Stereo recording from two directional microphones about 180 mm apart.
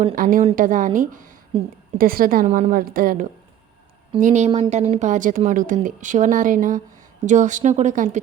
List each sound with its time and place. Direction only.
0.2 s a woman's voice: 50° right (ahead or behind)
1.5 s speech: 30° right (ahead or behind)
2.0 s a woman's voice: 50° right (ahead or behind)
4.2 s a woman's voice: 40° right (ahead or behind)